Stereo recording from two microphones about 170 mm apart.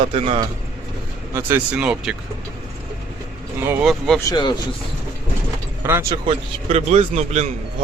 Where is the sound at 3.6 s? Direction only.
15° right (ahead or behind).